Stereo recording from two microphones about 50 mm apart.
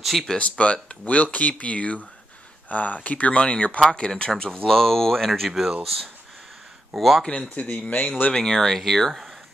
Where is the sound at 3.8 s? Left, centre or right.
Centre.